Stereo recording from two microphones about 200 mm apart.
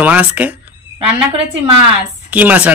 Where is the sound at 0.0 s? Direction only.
5° right (ahead or behind).